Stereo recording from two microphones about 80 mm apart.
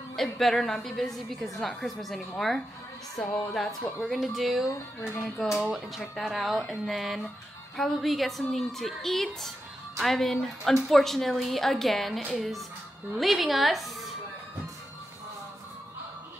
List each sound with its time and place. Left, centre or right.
0.1 s a woman's voice: centre
4.0 s a woman's voice: centre
5.0 s music: left
5.6 s a woman's voice: centre